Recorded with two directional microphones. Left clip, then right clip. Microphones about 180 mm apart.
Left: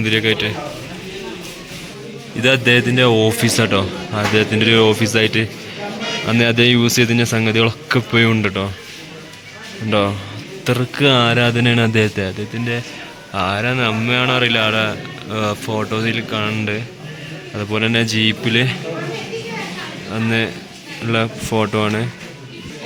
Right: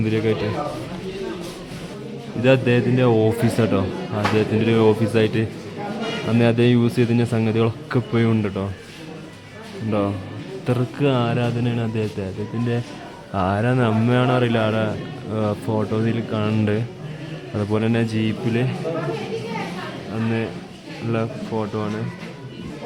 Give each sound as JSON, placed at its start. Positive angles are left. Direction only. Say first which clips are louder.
{"t": 0.0, "sound": "speech", "louder": "left 5 dB", "side_deg": -5}
{"t": 2.4, "sound": "speech", "louder": "left 4 dB", "side_deg": 0}
{"t": 9.9, "sound": "a man's voice", "louder": "left 6 dB", "side_deg": 5}
{"t": 13.3, "sound": "a man's voice", "louder": "left 3 dB", "side_deg": -20}
{"t": 17.6, "sound": "speech", "louder": "left 4 dB", "side_deg": -10}
{"t": 21.5, "sound": "speech", "louder": "left 9 dB", "side_deg": 25}